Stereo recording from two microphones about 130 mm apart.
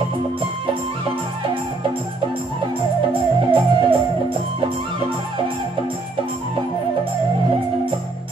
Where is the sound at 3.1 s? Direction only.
40° right (ahead or behind).